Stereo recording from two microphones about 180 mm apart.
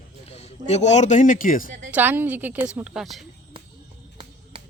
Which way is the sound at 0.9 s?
40° left (ahead or behind).